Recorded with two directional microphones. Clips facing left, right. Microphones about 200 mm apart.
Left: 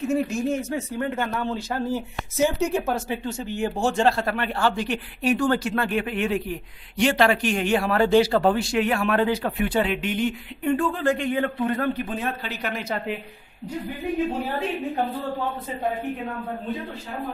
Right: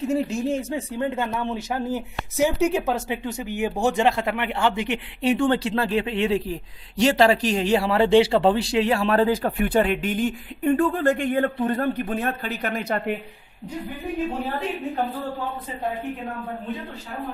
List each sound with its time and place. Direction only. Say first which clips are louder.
0.3 s a woman's voice: even; 30° right (ahead or behind); by 13.1 s 50° right (ahead or behind)